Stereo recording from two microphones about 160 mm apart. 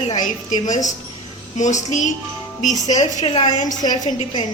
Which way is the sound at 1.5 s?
50° left (ahead or behind).